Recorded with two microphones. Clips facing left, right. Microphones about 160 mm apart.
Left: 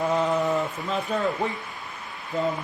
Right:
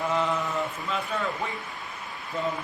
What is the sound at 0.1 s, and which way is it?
Mantra, 40° left (ahead or behind).